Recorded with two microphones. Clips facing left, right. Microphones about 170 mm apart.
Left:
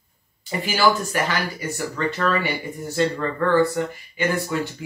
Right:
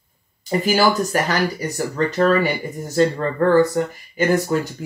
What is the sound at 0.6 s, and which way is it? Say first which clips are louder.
Speech: right 2 dB; 40° right (ahead or behind).